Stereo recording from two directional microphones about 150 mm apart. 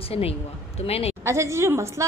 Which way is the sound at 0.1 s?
40° left (ahead or behind).